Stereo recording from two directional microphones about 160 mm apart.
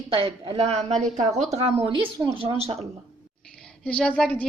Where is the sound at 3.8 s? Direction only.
5° left (ahead or behind).